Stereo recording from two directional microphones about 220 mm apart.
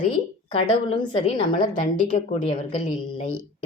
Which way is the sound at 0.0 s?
30° left (ahead or behind).